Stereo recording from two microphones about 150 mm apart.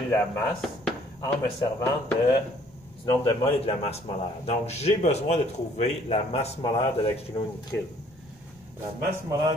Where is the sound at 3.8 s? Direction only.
40° left (ahead or behind).